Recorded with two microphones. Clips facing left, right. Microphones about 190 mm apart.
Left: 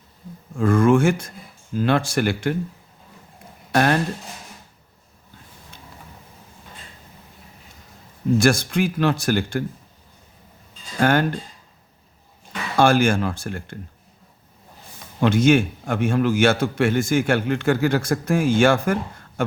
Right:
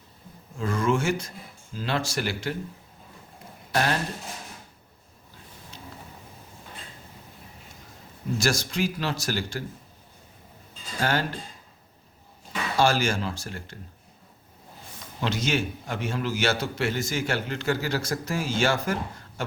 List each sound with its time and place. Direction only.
0.5 s a man's voice: 55° left (ahead or behind)
3.7 s speech: 55° left (ahead or behind)
8.4 s a man's voice: 55° left (ahead or behind)
11.0 s a man's voice: 55° left (ahead or behind)
12.7 s a man's voice: 55° left (ahead or behind)
15.2 s a man's voice: 55° left (ahead or behind)
19.4 s a sound: 55° left (ahead or behind)